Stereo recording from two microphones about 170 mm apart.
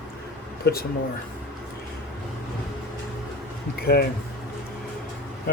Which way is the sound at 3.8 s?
70° left (ahead or behind).